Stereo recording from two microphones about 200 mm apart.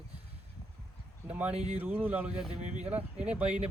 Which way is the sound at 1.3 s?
5° right (ahead or behind).